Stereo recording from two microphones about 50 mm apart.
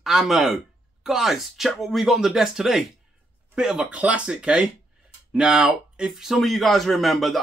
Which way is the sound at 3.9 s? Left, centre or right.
Right.